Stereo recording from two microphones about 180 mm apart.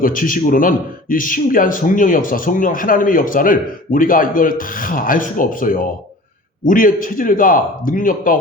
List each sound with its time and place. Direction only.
0.0 s a man's voice: 50° left (ahead or behind)